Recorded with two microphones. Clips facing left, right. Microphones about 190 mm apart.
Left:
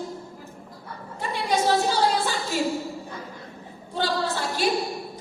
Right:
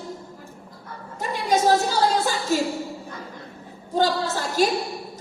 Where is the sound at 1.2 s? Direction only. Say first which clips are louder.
Right 3 dB; 40° right (ahead or behind).